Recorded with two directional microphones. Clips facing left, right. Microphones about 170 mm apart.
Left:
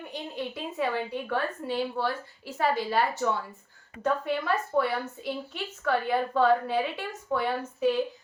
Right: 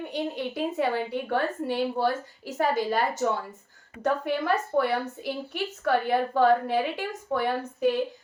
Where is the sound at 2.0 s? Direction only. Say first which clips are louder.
Right 4 dB; 45° right (ahead or behind).